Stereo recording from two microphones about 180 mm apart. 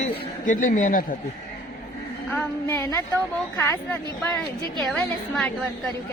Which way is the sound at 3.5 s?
10° left (ahead or behind).